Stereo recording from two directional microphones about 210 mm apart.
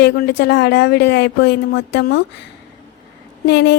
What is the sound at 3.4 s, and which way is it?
Speech, 55° left (ahead or behind).